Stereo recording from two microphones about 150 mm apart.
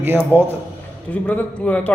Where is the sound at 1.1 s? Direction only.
10° left (ahead or behind).